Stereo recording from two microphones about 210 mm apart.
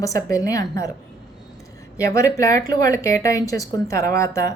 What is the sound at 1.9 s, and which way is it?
A woman's voice, 15° left (ahead or behind).